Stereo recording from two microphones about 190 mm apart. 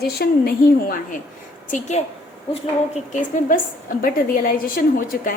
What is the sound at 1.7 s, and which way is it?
A woman's voice, 35° left (ahead or behind).